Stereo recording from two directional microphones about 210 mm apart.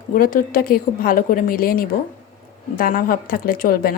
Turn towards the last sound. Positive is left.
turn(degrees=45)  # may be behind; listen again after turning